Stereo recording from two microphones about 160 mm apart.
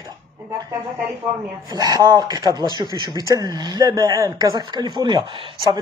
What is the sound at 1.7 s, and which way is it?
Speech, 25° right (ahead or behind).